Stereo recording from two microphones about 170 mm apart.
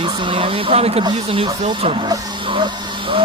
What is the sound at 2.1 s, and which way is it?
Vehicle, 30° right (ahead or behind).